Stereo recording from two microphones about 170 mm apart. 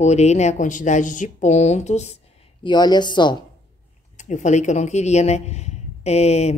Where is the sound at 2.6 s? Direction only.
25° left (ahead or behind).